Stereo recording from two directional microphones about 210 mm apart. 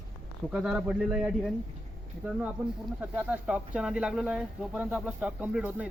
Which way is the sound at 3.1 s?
5° right (ahead or behind).